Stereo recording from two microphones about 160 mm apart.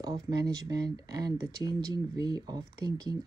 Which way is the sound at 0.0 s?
25° right (ahead or behind).